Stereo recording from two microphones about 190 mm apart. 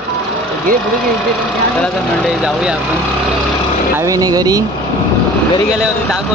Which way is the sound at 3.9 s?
20° right (ahead or behind).